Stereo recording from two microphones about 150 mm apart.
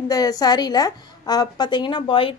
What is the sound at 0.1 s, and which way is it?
A woman's voice, 25° left (ahead or behind).